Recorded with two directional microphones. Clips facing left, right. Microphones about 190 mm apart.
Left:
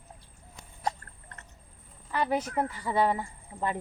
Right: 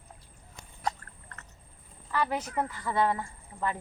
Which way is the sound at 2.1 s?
20° left (ahead or behind).